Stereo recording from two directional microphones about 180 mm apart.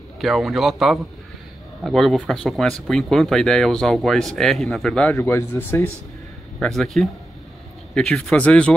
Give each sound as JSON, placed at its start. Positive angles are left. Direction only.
{"t": 0.2, "sound": "speech", "side_deg": 0}
{"t": 5.1, "sound": "speech", "side_deg": 15}
{"t": 6.6, "sound": "speech", "side_deg": 0}